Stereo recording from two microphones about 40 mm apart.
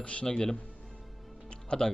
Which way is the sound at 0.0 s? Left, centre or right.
Left.